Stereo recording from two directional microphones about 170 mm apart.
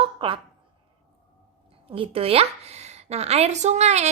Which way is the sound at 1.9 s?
35° right (ahead or behind).